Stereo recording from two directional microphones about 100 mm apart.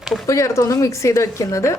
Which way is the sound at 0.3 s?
30° left (ahead or behind).